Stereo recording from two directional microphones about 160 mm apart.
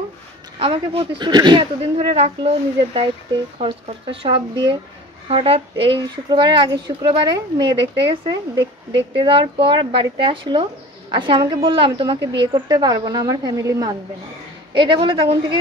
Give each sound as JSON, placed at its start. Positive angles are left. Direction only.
{"t": 0.6, "sound": "speech", "side_deg": -35}
{"t": 2.0, "sound": "speech", "side_deg": -40}